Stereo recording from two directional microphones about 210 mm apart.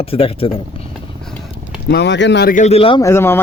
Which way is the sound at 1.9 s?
55° left (ahead or behind).